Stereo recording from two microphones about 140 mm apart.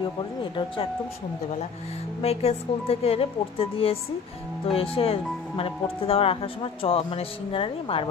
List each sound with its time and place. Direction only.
0.0 s speech: 35° left (ahead or behind)
2.2 s a woman's voice: 45° left (ahead or behind)